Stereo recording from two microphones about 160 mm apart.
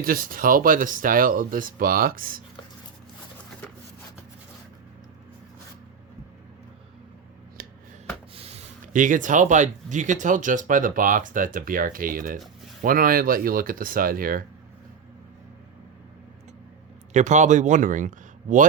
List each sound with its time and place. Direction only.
0.0 s speech: 65° right (ahead or behind)
8.4 s speech: 40° right (ahead or behind); by 14.4 s 65° right (ahead or behind)
17.2 s speech: 50° right (ahead or behind)